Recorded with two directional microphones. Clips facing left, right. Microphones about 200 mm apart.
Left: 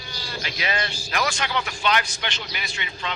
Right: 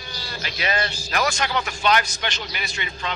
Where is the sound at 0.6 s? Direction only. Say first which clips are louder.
Right 3 dB; 40° right (ahead or behind).